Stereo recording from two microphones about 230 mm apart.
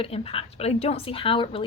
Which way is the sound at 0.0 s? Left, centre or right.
Left.